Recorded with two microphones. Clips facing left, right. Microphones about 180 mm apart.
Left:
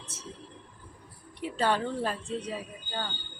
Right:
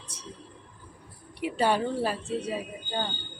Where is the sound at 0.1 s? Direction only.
15° right (ahead or behind).